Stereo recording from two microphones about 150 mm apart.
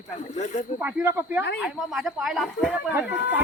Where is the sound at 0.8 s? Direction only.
10° right (ahead or behind).